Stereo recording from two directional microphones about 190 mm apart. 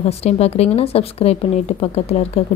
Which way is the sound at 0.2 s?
35° left (ahead or behind).